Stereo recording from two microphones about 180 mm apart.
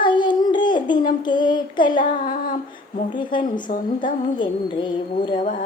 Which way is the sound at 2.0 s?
50° left (ahead or behind).